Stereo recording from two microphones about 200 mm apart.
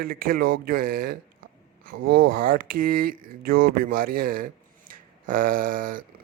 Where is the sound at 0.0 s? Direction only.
45° right (ahead or behind).